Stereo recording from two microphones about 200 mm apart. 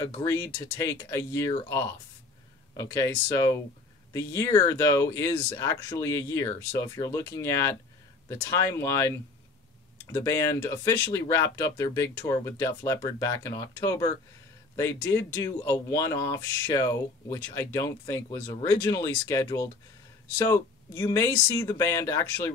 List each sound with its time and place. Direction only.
0.0 s speech: 15° left (ahead or behind)
10.1 s speech: 15° left (ahead or behind)